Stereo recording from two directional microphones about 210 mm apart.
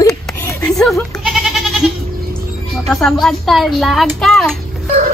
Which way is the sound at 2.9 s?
Centre (ahead or behind).